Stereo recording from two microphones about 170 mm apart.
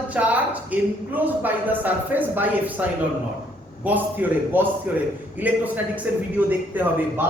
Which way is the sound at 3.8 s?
10° right (ahead or behind).